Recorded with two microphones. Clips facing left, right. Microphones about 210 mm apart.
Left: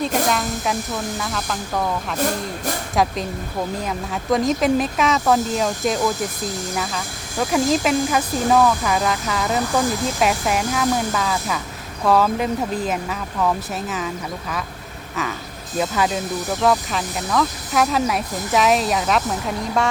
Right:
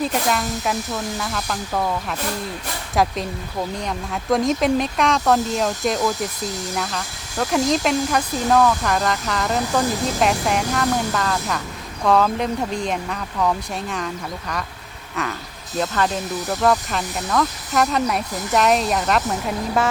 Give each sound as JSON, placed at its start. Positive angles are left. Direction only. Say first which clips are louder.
{"t": 0.3, "sound": "speech", "louder": "even", "side_deg": 0}
{"t": 2.1, "sound": "speech", "louder": "left 4 dB", "side_deg": 45}
{"t": 2.9, "sound": "speech", "louder": "right 1 dB", "side_deg": 0}
{"t": 15.1, "sound": "speech", "louder": "even", "side_deg": 0}